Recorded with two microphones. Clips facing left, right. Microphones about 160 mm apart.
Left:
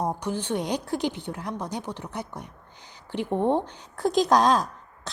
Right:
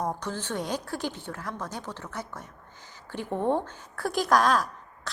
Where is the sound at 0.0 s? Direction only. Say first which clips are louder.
Left 3 dB; 10° left (ahead or behind).